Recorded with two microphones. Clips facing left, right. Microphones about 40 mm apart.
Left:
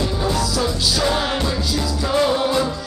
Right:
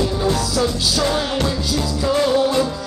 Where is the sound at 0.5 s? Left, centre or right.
Centre.